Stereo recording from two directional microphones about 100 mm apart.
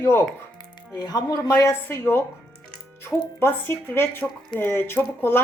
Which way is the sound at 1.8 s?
20° left (ahead or behind).